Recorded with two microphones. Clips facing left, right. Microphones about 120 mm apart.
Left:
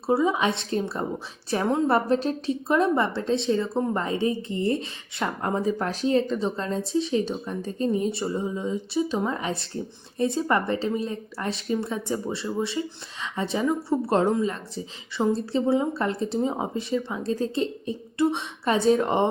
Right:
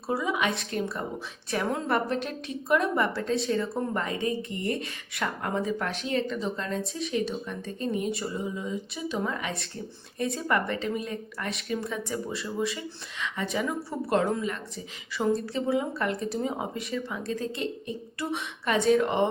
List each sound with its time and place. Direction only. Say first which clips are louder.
0.1 s a woman's voice: left 5 dB; 30° left (ahead or behind)